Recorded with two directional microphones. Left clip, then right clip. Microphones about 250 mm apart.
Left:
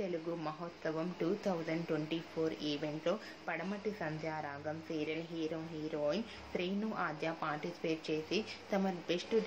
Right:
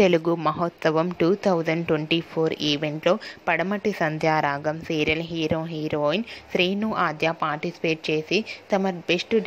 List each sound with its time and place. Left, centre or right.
0.0 s a woman's voice: right